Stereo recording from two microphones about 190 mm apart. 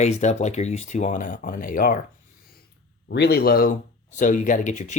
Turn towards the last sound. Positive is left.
turn(degrees=40)  # may be behind; listen again after turning